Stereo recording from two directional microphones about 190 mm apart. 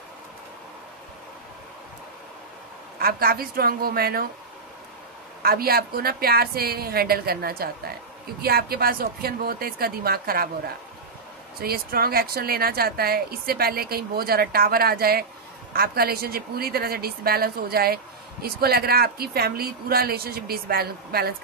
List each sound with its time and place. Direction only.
3.0 s a woman's voice: 50° right (ahead or behind)
5.4 s a woman's voice: 50° right (ahead or behind)
11.6 s a woman's voice: 55° right (ahead or behind)